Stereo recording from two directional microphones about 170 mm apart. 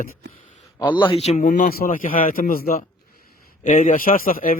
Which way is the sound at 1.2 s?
45° left (ahead or behind).